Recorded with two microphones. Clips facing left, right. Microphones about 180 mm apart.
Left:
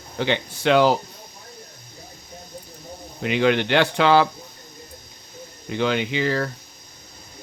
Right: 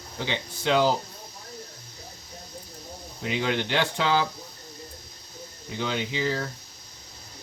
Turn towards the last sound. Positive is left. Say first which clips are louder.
# left 5 dB
turn(degrees=65)  # may be behind; listen again after turning